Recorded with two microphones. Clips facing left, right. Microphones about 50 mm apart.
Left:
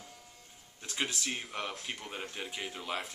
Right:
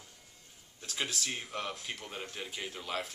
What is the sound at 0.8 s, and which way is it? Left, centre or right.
Speech, centre.